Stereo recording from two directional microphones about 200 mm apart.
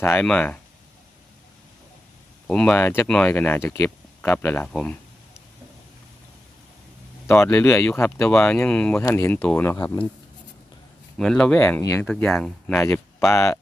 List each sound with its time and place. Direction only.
0.0 s speech: 10° left (ahead or behind)
2.5 s speech: 5° left (ahead or behind)
7.3 s speech: 10° left (ahead or behind)
11.2 s speech: 5° left (ahead or behind)
12.1 s speech: 5° left (ahead or behind)